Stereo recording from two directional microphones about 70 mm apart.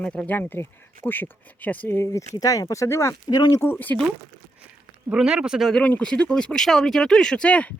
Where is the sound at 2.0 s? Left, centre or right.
Left.